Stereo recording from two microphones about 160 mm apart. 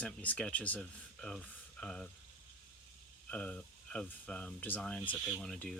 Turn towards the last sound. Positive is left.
turn(degrees=5)  # may be behind; listen again after turning